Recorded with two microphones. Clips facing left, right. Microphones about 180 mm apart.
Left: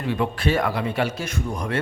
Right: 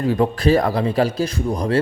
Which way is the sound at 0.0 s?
40° right (ahead or behind).